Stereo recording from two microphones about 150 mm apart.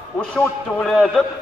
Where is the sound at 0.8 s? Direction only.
Centre (ahead or behind).